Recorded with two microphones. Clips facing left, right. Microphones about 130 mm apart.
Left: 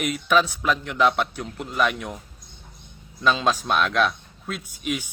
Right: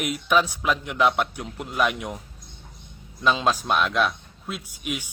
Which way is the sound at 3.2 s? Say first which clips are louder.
Even; 10° right (ahead or behind).